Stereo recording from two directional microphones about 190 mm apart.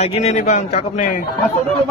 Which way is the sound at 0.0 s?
35° left (ahead or behind).